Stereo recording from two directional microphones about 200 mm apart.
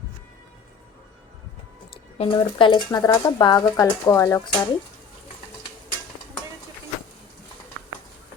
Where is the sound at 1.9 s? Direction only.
25° left (ahead or behind).